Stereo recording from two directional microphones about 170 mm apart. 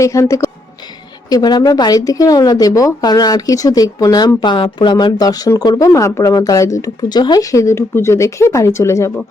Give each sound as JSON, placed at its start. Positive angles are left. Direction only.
{"t": 0.0, "sound": "a woman's voice", "side_deg": 15}